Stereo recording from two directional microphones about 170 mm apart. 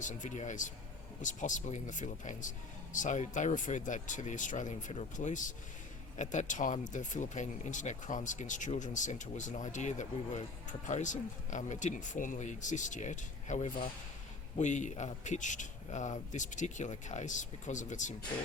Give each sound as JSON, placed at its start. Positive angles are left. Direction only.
{"t": 0.0, "sound": "speech", "side_deg": 45}